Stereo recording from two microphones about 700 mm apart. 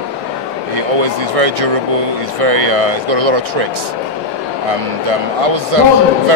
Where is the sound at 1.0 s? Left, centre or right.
Right.